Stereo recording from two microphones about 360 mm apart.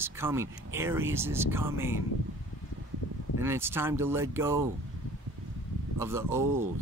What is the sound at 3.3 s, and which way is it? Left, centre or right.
Speech, centre.